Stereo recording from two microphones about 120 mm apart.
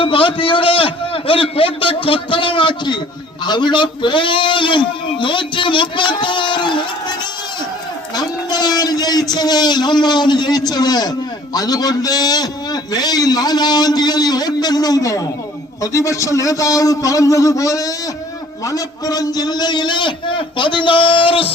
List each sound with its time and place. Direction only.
0.0 s a man's voice: 45° left (ahead or behind)
8.1 s a man's voice: 35° left (ahead or behind)